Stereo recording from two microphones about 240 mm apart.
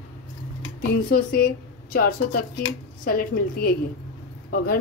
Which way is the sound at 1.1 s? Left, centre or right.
Left.